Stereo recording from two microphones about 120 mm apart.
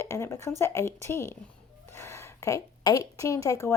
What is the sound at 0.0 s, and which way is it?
A woman's voice, 20° left (ahead or behind).